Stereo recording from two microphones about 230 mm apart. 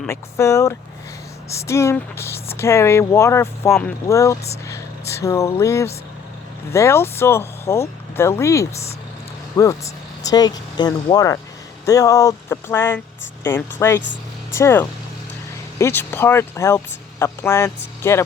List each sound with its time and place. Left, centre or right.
0.0 s speech: centre